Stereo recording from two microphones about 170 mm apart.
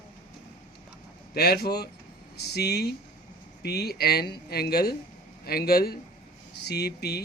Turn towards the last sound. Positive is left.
turn(degrees=70)  # may be behind; listen again after turning